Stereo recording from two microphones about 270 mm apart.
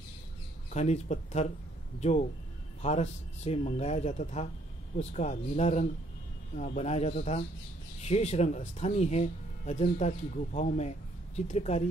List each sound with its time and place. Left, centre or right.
0.7 s speech: left